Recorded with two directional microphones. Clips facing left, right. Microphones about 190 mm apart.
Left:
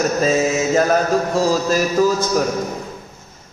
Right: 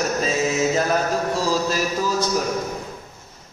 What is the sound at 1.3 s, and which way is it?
Speech, 45° left (ahead or behind).